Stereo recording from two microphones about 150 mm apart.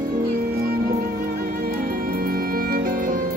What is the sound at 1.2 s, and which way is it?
Music, 80° right.